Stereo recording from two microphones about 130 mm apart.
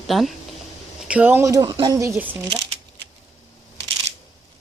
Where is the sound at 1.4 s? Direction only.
25° right (ahead or behind).